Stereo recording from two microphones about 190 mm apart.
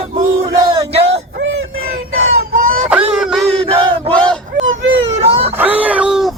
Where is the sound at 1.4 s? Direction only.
90° right.